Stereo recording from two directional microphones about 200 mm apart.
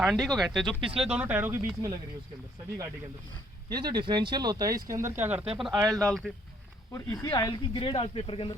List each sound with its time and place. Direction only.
0.0 s speech: centre (ahead or behind)
3.7 s speech: 20° right (ahead or behind); by 6.3 s centre (ahead or behind)
6.9 s speech: 15° left (ahead or behind)